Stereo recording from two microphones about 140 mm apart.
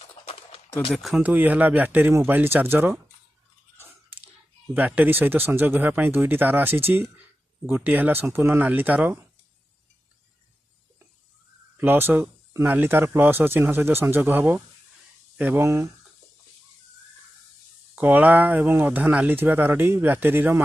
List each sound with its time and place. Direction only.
0.9 s speech: centre (ahead or behind)
1.2 s speech: 10° right (ahead or behind)
3.8 s a sound: 15° right (ahead or behind)
4.7 s speech: 10° right (ahead or behind)
11.8 s speech: 15° right (ahead or behind)
17.9 s speech: 10° right (ahead or behind)